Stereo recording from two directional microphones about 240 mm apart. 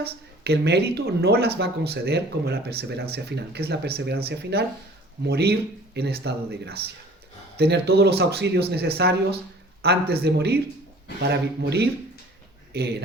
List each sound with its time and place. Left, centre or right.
0.0 s speech: right